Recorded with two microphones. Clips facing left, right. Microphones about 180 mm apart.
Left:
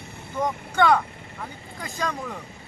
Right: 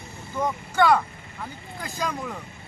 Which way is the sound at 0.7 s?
5° right (ahead or behind).